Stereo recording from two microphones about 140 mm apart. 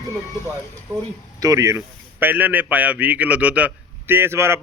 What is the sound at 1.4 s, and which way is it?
A man's voice, 20° right (ahead or behind).